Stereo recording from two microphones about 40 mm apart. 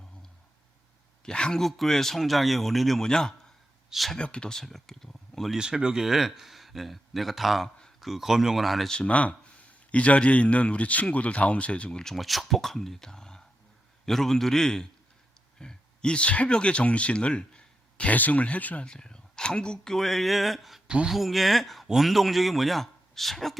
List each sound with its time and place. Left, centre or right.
1.2 s speech: left
1.5 s speech: centre
3.0 s speech: centre
4.5 s speech: centre
5.5 s speech: right; by 8.9 s centre
8.9 s a man's voice: left
11.9 s speech: centre
12.1 s speech: centre; by 18.1 s left
18.1 s speech: left
18.9 s speech: centre
19.9 s speech: centre
20.8 s speech: right
21.1 s speech: centre